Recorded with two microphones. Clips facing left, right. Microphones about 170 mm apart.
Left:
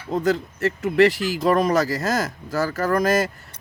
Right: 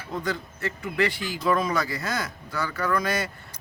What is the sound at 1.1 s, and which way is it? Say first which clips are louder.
Speech: left 8 dB; 90° left.